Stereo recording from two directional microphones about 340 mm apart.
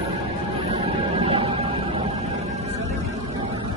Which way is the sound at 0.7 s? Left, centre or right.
Centre.